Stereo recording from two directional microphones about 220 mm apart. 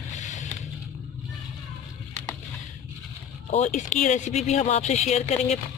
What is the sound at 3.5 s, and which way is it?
Speech, 35° left (ahead or behind).